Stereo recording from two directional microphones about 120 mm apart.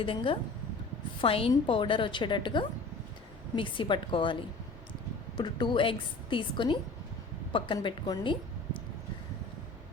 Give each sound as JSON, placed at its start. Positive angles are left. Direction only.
{"t": 0.0, "sound": "a woman's voice", "side_deg": 50}
{"t": 5.4, "sound": "a woman's voice", "side_deg": 40}